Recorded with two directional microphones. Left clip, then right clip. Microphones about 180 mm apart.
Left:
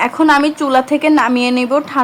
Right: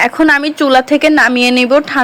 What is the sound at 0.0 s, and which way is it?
Speech, 20° right (ahead or behind).